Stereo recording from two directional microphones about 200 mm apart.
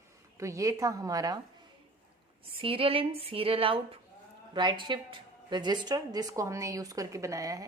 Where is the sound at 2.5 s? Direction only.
25° right (ahead or behind).